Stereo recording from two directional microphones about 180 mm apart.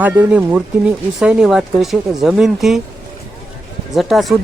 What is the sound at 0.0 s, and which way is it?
Speech, 10° right (ahead or behind).